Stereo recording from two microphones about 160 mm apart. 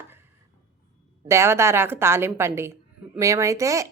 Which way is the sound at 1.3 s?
15° right (ahead or behind).